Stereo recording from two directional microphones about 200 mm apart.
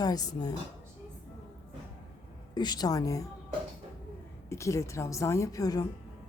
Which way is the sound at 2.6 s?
20° left (ahead or behind).